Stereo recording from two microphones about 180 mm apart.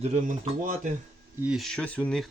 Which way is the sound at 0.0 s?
45° right (ahead or behind).